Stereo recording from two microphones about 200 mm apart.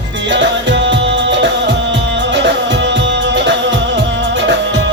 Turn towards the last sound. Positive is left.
turn(degrees=-60)  # may be behind; listen again after turning